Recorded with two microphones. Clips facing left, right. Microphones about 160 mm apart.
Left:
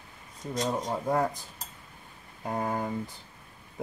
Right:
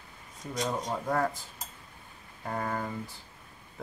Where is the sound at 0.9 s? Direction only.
15° left (ahead or behind).